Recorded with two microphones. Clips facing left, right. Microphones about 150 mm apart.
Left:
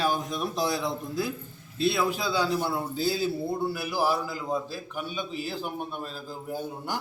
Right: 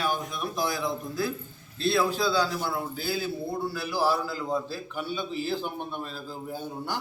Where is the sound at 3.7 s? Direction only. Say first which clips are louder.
Even; 15° left (ahead or behind).